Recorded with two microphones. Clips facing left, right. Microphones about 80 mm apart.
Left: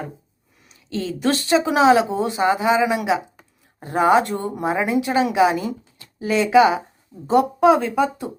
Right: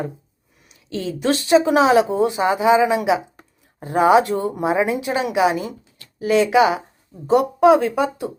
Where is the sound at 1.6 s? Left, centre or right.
Right.